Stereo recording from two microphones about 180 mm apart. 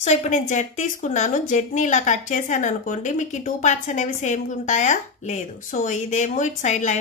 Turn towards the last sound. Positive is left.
turn(degrees=40)  # may be behind; listen again after turning